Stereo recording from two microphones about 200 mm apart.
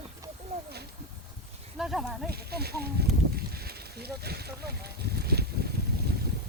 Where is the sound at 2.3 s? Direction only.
50° right (ahead or behind).